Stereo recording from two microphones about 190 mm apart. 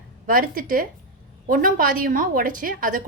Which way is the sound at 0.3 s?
45° right (ahead or behind).